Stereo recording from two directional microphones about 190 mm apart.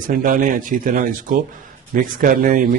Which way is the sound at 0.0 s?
45° right (ahead or behind).